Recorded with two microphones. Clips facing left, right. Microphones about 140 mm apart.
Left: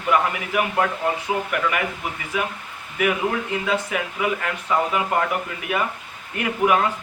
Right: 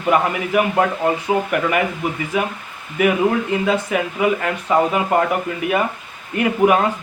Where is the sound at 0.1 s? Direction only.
30° right (ahead or behind).